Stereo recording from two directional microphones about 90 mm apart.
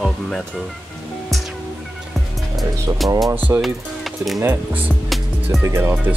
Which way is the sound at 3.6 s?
Centre (ahead or behind).